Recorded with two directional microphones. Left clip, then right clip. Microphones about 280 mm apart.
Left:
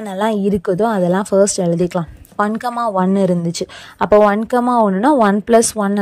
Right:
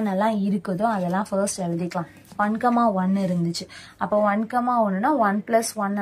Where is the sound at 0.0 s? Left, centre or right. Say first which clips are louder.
Left 5 dB; left.